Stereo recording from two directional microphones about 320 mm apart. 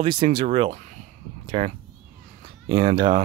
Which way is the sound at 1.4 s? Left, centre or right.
Right.